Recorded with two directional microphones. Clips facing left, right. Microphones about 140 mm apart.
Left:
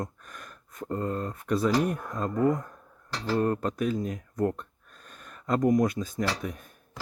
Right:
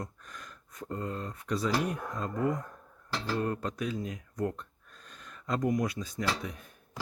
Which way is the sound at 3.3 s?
45° left (ahead or behind).